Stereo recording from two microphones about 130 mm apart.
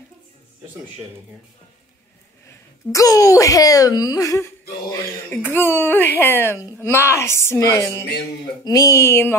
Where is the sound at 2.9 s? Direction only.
25° left (ahead or behind).